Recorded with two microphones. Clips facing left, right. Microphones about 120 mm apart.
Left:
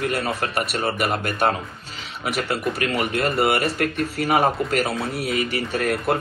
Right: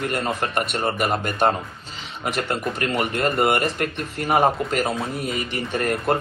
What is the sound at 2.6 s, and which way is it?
Speech, centre (ahead or behind).